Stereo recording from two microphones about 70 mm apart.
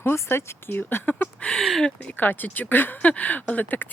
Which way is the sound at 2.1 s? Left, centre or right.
Left.